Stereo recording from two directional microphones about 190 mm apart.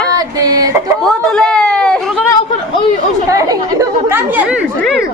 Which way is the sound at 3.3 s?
15° right (ahead or behind).